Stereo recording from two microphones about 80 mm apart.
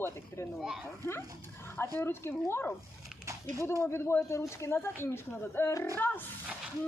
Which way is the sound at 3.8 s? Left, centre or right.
Left.